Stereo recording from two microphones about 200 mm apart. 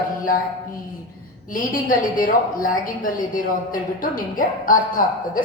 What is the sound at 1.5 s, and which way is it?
A woman's voice, 45° left (ahead or behind).